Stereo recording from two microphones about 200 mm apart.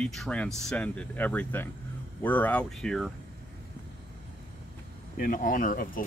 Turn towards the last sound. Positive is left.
turn(degrees=40)  # may be behind; listen again after turning